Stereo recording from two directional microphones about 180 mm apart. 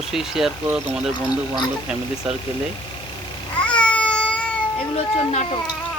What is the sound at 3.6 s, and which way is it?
Cat, 5° left (ahead or behind).